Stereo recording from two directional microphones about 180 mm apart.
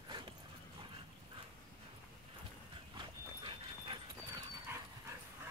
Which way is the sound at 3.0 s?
25° right (ahead or behind).